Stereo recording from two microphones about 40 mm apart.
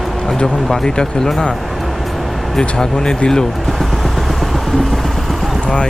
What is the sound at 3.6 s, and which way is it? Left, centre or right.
Vehicle, centre.